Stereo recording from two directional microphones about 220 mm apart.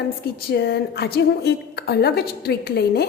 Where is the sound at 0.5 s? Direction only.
45° left (ahead or behind).